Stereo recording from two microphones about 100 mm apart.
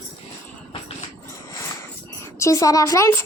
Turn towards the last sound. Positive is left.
turn(degrees=30)  # may be behind; listen again after turning